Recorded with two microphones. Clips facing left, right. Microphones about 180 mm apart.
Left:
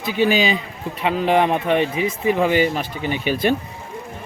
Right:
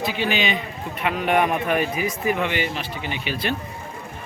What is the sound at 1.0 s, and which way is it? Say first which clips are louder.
Speech: left 3 dB; 30° left (ahead or behind).